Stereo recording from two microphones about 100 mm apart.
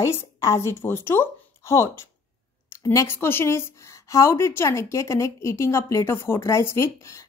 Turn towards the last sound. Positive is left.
turn(degrees=30)  # may be behind; listen again after turning